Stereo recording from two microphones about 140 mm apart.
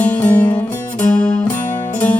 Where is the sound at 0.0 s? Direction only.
10° left (ahead or behind).